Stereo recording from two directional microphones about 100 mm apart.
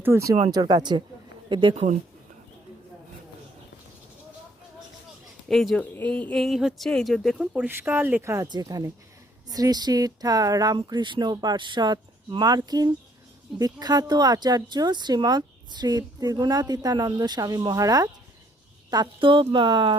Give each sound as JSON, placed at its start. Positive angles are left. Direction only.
{"t": 0.0, "sound": "speech", "side_deg": -30}
{"t": 0.5, "sound": "speech", "side_deg": -45}
{"t": 5.5, "sound": "speech", "side_deg": 5}
{"t": 5.9, "sound": "speech", "side_deg": 15}
{"t": 6.4, "sound": "speech", "side_deg": -5}
{"t": 7.9, "sound": "speech", "side_deg": -20}
{"t": 9.5, "sound": "speech", "side_deg": -40}
{"t": 19.2, "sound": "speech", "side_deg": -60}